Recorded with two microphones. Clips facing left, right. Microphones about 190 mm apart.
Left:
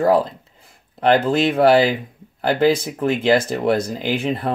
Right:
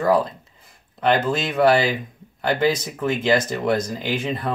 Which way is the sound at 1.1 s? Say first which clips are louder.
Left 6 dB; 30° left (ahead or behind).